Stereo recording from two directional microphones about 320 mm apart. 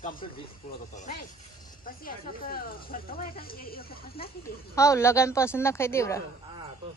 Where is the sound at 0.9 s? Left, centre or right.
Left.